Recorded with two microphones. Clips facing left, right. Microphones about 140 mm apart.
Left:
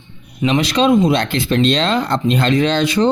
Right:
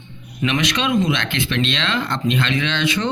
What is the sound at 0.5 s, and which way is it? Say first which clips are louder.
Speech: left 7 dB; 30° left (ahead or behind).